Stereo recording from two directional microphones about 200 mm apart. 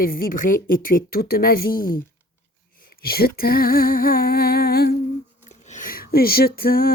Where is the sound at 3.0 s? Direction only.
50° left (ahead or behind).